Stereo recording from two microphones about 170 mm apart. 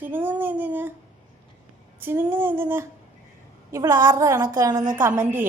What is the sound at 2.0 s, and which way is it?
A woman's voice, 10° right (ahead or behind).